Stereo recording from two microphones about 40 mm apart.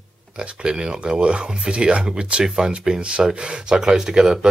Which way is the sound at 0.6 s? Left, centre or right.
Right.